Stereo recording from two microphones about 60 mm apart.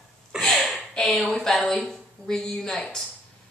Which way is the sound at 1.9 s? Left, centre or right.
Centre.